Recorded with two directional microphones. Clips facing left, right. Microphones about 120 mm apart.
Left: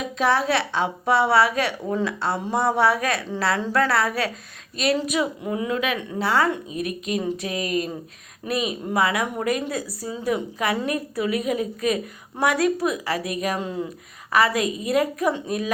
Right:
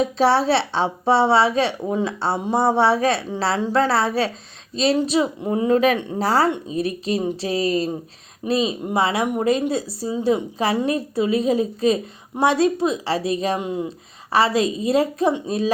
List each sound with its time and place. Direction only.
0.0 s a woman's voice: 30° right (ahead or behind)